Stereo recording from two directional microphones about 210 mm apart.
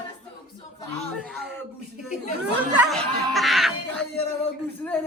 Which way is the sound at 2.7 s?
Centre (ahead or behind).